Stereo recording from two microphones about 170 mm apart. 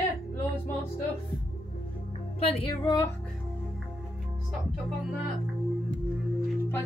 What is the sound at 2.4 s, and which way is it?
Speech, 35° left (ahead or behind).